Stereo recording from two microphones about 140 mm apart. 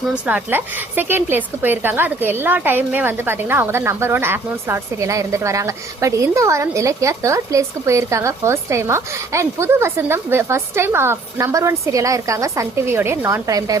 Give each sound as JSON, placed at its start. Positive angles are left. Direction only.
{"t": 0.1, "sound": "a woman's voice", "side_deg": -10}